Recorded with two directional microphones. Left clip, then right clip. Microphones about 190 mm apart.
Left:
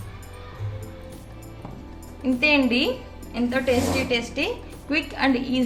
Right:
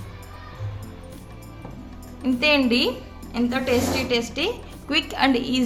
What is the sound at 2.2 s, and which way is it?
A woman's voice, 45° right (ahead or behind).